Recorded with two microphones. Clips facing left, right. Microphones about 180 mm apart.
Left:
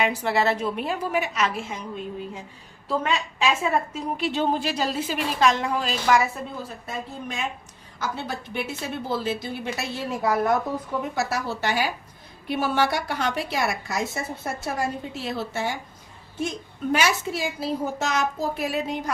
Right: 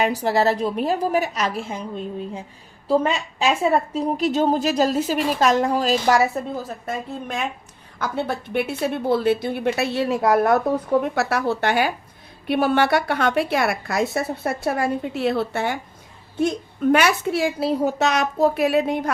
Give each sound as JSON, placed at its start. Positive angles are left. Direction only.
{"t": 0.0, "sound": "a woman's voice", "side_deg": -40}
{"t": 2.8, "sound": "a woman's voice", "side_deg": -35}